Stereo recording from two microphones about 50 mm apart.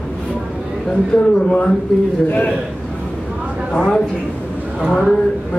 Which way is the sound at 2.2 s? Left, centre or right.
Left.